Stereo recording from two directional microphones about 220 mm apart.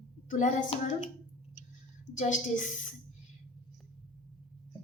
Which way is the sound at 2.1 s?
35° left (ahead or behind).